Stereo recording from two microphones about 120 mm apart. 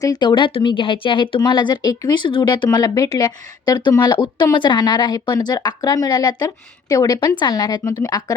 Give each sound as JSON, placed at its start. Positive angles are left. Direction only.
{"t": 0.0, "sound": "a woman's voice", "side_deg": 35}